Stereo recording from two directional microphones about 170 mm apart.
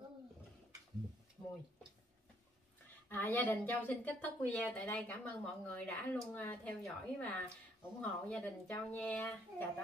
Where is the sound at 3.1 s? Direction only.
10° left (ahead or behind).